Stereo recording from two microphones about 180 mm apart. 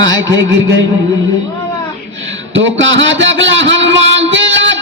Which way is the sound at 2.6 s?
90° right.